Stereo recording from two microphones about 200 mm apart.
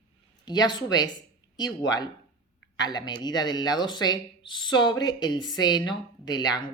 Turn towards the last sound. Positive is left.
turn(degrees=20)  # may be behind; listen again after turning